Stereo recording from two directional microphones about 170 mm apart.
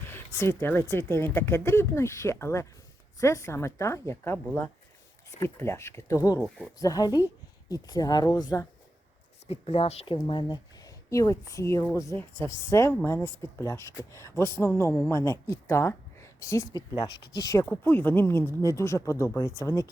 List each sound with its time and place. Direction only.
0.1 s speech: 15° left (ahead or behind)
9.6 s speech: 35° left (ahead or behind)
10.2 s speech: 25° left (ahead or behind)